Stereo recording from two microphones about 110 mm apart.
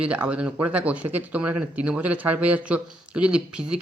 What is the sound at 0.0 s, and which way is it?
Speech, 10° right (ahead or behind).